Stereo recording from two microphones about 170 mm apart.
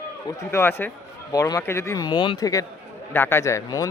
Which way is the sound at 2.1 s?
30° left (ahead or behind).